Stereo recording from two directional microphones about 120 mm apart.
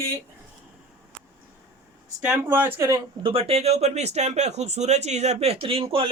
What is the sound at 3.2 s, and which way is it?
Speech, 55° right (ahead or behind).